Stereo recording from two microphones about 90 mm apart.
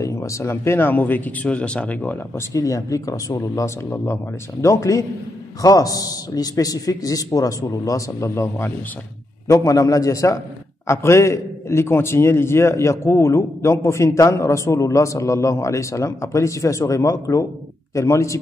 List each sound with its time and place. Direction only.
0.0 s speech: 35° left (ahead or behind); by 2.1 s 15° left (ahead or behind)
2.3 s a man's voice: 40° left (ahead or behind)